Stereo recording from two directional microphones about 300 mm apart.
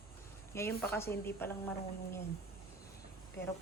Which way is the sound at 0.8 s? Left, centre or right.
Centre.